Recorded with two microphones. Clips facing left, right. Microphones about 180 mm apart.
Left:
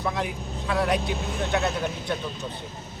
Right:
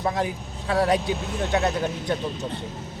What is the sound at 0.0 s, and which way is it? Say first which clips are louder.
Speech: right 3 dB; 40° right (ahead or behind).